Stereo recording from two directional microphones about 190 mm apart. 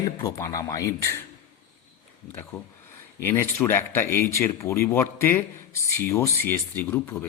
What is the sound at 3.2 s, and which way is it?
Speech, 10° left (ahead or behind).